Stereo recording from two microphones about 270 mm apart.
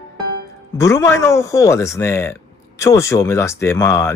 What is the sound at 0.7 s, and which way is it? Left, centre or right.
Speech, centre.